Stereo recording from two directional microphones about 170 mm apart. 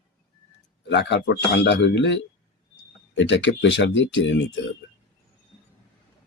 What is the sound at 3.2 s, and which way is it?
Speech, 90° left.